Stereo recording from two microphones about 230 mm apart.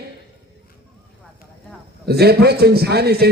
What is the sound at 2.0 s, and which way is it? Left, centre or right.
Speech, right.